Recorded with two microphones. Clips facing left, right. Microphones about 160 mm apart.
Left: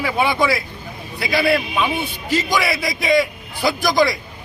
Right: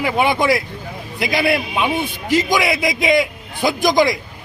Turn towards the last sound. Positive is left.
turn(degrees=-20)  # may be behind; listen again after turning